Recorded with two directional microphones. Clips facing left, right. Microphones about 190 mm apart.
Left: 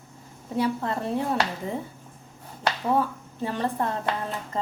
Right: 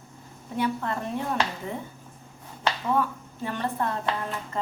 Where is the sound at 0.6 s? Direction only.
35° left (ahead or behind).